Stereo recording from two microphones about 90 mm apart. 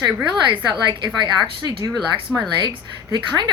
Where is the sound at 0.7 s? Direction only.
55° right (ahead or behind).